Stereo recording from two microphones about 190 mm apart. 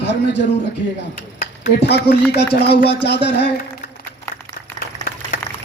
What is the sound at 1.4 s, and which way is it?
A man's voice, 55° left (ahead or behind).